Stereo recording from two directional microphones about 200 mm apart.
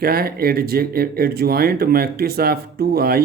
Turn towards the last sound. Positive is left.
turn(degrees=-50)  # may be behind; listen again after turning